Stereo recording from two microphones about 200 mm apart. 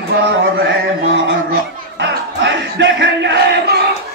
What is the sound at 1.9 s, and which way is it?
Crowd, 65° right (ahead or behind).